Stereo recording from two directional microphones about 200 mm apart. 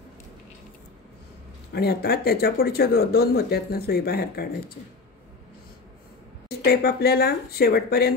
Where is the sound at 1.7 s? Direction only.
50° left (ahead or behind).